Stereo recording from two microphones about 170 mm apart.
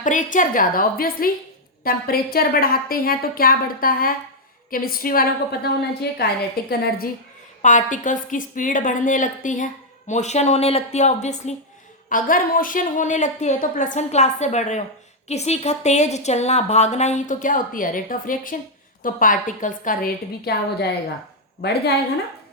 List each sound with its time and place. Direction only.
0.0 s a woman's voice: 50° left (ahead or behind)
6.0 s a woman's voice: 70° left (ahead or behind)
7.6 s a woman's voice: 45° left (ahead or behind)
12.0 s a woman's voice: 55° left (ahead or behind); by 21.9 s 75° left (ahead or behind)